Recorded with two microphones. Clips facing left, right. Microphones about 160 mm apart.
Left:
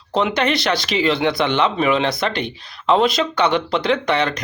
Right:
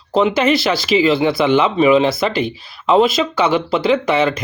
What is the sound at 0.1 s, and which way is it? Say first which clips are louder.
Speech: right 4 dB; centre (ahead or behind).